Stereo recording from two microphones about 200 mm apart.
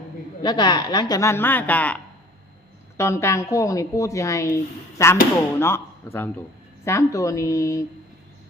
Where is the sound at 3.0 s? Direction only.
15° left (ahead or behind).